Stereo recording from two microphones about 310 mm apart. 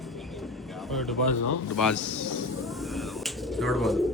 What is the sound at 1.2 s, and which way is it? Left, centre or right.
Speech, left.